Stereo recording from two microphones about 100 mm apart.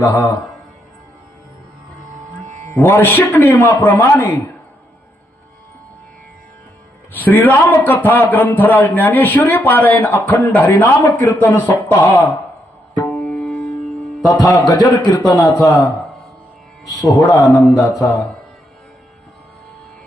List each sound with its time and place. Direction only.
0.0 s a man's voice: 20° left (ahead or behind)
2.7 s a man's voice: 20° left (ahead or behind)
7.1 s a man's voice: 20° left (ahead or behind)
13.1 s tabla: 5° left (ahead or behind)
14.3 s a man's voice: 45° left (ahead or behind)
16.9 s speech: 40° left (ahead or behind)